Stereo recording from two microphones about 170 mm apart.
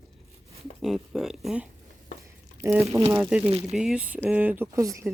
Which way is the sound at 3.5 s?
35° right (ahead or behind).